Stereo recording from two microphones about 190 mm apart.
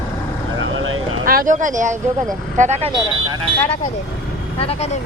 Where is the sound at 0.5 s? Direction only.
90° right.